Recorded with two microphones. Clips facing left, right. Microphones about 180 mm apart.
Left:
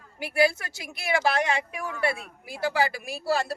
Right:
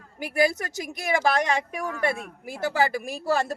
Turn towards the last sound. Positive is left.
turn(degrees=-45)  # may be behind; listen again after turning